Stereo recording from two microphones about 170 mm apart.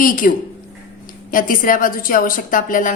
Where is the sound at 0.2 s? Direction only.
55° left (ahead or behind).